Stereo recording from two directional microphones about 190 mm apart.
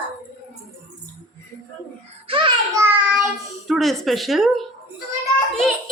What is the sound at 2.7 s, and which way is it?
Child singing, 10° right (ahead or behind).